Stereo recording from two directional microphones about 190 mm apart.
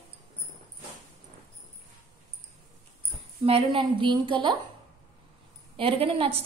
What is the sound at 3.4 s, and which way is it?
A woman's voice, 30° right (ahead or behind).